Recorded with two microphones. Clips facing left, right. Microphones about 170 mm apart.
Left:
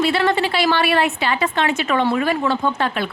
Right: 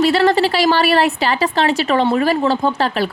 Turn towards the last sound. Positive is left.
turn(degrees=-35)  # may be behind; listen again after turning